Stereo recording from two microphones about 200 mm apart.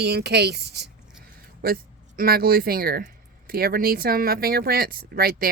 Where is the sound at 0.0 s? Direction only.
55° right (ahead or behind).